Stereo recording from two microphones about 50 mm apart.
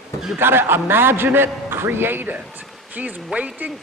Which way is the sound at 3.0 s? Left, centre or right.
Right.